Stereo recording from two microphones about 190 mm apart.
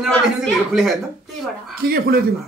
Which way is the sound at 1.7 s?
50° right (ahead or behind).